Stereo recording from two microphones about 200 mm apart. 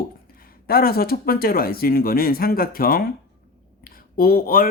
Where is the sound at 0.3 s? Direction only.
45° left (ahead or behind).